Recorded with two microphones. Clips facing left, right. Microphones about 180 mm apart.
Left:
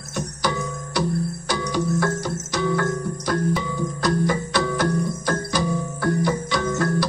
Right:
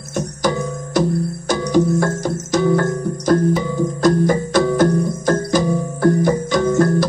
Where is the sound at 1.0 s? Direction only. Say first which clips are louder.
Right 6 dB; 45° right (ahead or behind).